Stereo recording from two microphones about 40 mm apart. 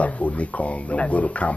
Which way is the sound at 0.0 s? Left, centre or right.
Left.